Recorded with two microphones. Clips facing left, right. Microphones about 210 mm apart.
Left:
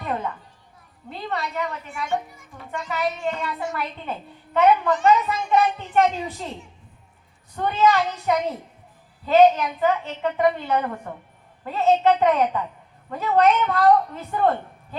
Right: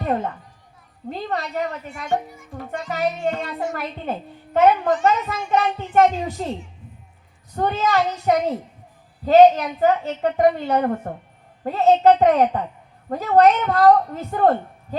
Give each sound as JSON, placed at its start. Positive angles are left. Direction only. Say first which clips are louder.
{"t": 0.0, "sound": "a sound", "louder": "right 5 dB", "side_deg": -40}
{"t": 1.1, "sound": "a child's voice", "louder": "right 2 dB", "side_deg": -40}
{"t": 7.5, "sound": "a child's voice", "louder": "even", "side_deg": -40}